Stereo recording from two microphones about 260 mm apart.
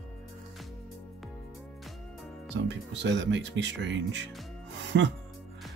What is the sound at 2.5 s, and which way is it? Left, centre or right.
Speech, right.